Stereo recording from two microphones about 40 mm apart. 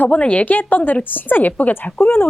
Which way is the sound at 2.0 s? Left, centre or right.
Left.